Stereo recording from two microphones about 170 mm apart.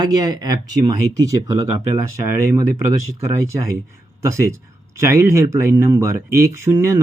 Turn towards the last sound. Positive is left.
turn(degrees=-15)  # may be behind; listen again after turning